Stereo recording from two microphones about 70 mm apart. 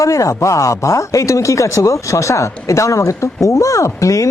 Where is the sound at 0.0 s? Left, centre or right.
Left.